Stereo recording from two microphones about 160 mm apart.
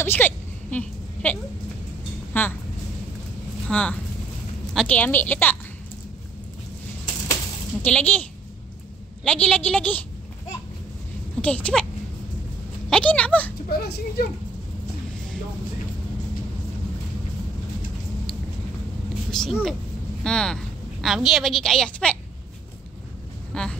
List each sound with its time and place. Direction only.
0.0 s a sound: 10° left (ahead or behind)
2.3 s a woman's voice: 15° left (ahead or behind)
3.6 s a woman's voice: 5° left (ahead or behind)
7.8 s a woman's voice: 10° left (ahead or behind)
11.4 s a woman's voice: 10° left (ahead or behind)
12.9 s a woman's voice: 5° left (ahead or behind)
13.7 s speech: 80° left
19.3 s a woman's voice: centre (ahead or behind)
23.5 s a woman's voice: 5° left (ahead or behind)